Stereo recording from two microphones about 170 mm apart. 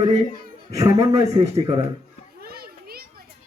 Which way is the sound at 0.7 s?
20° right (ahead or behind).